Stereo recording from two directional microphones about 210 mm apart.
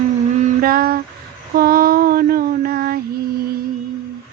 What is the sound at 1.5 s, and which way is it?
Female singing, 45° right (ahead or behind).